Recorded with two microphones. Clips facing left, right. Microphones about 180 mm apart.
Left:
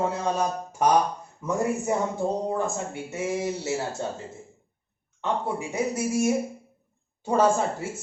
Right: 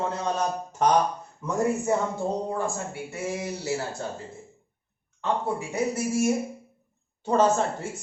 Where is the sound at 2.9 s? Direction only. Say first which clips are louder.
Left 3 dB; 20° left (ahead or behind).